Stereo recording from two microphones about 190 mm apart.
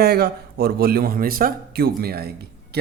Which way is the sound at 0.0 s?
55° right (ahead or behind).